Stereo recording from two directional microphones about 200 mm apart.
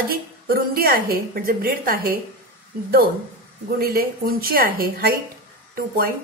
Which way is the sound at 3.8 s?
50° right (ahead or behind).